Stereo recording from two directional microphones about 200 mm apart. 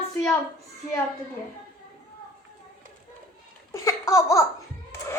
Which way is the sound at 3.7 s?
15° left (ahead or behind).